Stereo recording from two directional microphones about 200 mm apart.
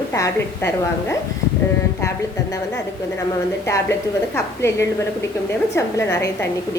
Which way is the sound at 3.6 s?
15° left (ahead or behind).